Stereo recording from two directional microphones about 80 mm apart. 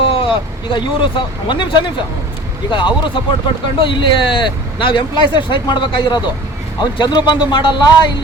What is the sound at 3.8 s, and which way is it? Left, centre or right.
Speech, left.